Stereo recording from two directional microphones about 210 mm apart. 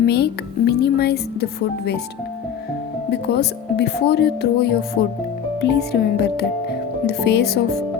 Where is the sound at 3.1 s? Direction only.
55° left (ahead or behind).